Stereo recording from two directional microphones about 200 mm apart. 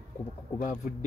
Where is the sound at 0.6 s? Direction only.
40° left (ahead or behind).